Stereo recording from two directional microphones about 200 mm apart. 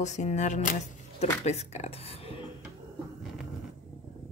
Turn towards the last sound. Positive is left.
turn(degrees=0)  # may be behind; listen again after turning